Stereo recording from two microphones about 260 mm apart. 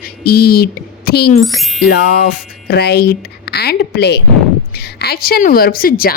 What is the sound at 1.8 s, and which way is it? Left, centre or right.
A woman's voice, left.